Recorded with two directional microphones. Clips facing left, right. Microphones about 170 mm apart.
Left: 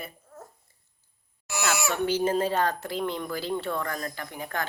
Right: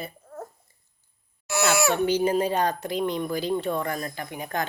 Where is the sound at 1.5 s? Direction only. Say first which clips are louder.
Right 6 dB; 60° right (ahead or behind).